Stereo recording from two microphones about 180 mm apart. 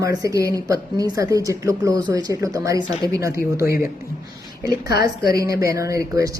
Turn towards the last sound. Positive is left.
turn(degrees=-20)  # may be behind; listen again after turning